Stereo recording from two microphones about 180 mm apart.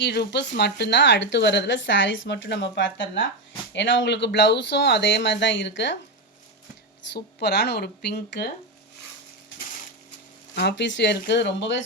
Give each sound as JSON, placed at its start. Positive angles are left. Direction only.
{"t": 0.0, "sound": "speech", "side_deg": 70}
{"t": 7.1, "sound": "speech", "side_deg": 70}
{"t": 10.5, "sound": "speech", "side_deg": 70}